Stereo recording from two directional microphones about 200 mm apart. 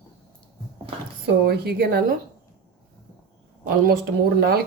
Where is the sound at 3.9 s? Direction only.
50° right (ahead or behind).